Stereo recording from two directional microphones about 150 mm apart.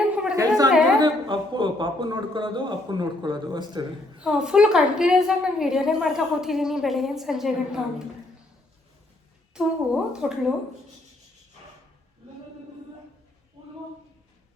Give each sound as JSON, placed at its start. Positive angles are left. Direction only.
{"t": 0.3, "sound": "a sound", "side_deg": -25}
{"t": 0.9, "sound": "a man's voice", "side_deg": -30}
{"t": 4.2, "sound": "a woman's voice", "side_deg": -5}
{"t": 9.6, "sound": "a woman's voice", "side_deg": -5}